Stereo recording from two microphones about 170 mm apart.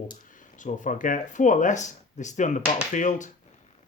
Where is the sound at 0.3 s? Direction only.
50° left (ahead or behind).